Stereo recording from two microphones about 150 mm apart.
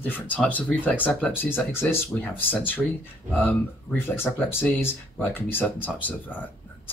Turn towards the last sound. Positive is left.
turn(degrees=10)  # may be behind; listen again after turning